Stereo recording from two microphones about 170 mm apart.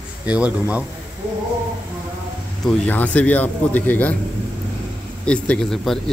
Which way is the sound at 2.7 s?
10° left (ahead or behind).